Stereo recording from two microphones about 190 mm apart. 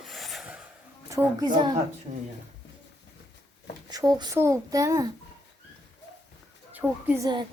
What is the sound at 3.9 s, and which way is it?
A child's voice, 20° right (ahead or behind).